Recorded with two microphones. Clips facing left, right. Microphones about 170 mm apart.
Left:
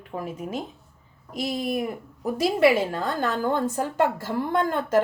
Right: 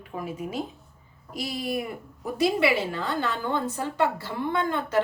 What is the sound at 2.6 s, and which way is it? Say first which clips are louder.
A woman's voice: left 5 dB; 45° left (ahead or behind).